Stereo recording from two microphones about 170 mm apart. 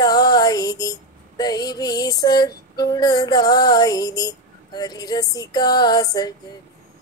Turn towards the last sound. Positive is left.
turn(degrees=20)  # may be behind; listen again after turning